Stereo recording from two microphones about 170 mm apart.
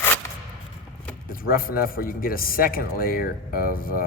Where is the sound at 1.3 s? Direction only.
60° left (ahead or behind).